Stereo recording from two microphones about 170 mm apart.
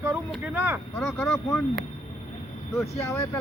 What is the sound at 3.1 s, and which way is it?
Speech, 15° left (ahead or behind).